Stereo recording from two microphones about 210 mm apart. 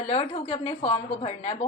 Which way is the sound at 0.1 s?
30° left (ahead or behind).